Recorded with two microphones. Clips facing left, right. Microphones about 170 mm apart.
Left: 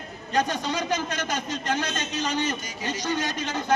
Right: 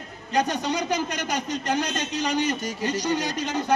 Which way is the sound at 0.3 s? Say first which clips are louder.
Right 1 dB; 15° right (ahead or behind).